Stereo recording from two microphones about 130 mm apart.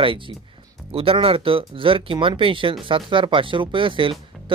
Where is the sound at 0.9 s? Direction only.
45° right (ahead or behind).